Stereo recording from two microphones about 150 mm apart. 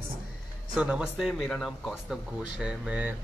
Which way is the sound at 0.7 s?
5° right (ahead or behind).